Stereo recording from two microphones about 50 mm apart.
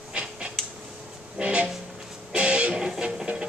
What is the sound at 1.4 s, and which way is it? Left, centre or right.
Music, right.